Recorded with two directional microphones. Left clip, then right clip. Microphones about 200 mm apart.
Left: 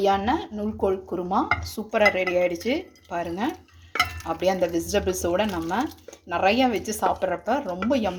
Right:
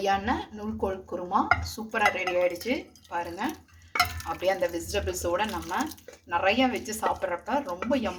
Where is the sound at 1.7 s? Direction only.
40° left (ahead or behind).